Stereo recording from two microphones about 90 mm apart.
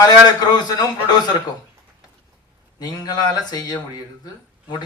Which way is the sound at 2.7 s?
50° left (ahead or behind).